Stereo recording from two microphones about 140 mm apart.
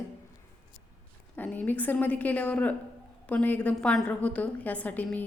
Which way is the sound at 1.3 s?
10° left (ahead or behind).